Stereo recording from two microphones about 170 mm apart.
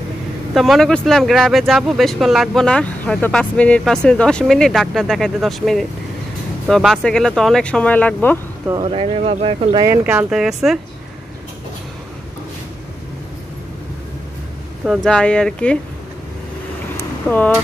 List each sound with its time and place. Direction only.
0.6 s speech: centre (ahead or behind)
8.8 s speech: 35° right (ahead or behind)
9.8 s speech: 5° right (ahead or behind)
14.9 s speech: 5° left (ahead or behind)
16.9 s vehicle: 10° left (ahead or behind)